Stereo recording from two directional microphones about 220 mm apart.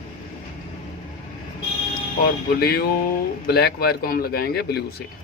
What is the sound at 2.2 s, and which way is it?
Speech, 45° left (ahead or behind).